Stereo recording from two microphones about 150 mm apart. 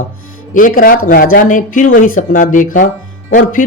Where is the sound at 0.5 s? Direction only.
65° left (ahead or behind).